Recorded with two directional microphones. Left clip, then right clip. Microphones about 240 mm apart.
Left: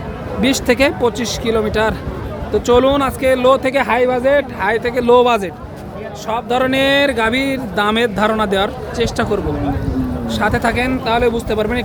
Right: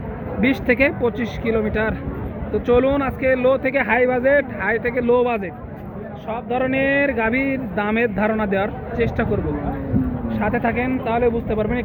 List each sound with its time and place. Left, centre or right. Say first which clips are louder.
0.4 s speech: left 4 dB; centre
10.4 s speech: left 5 dB; centre